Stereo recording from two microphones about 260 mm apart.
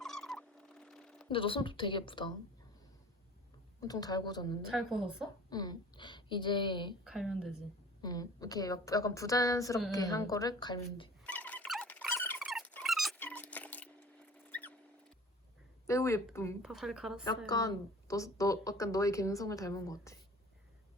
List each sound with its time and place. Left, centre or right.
0.0 s fowl: centre
1.3 s a woman's voice: centre
3.8 s a woman's voice: centre
4.7 s a woman's voice: centre
5.5 s a woman's voice: centre
7.0 s a woman's voice: centre
8.0 s a woman's voice: centre
11.2 s a sound: centre
15.9 s a woman's voice: centre
16.6 s a woman's voice: centre
17.2 s a woman's voice: centre